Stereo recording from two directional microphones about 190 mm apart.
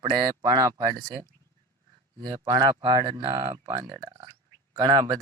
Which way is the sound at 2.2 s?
20° right (ahead or behind).